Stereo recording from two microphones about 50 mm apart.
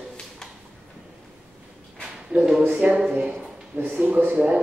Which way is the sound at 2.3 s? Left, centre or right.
Right.